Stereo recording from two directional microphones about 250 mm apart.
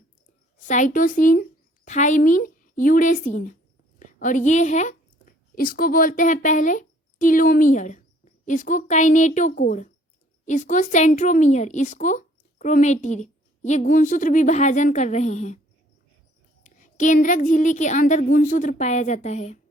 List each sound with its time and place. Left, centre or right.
0.9 s a woman's voice: left
16.6 s speech: left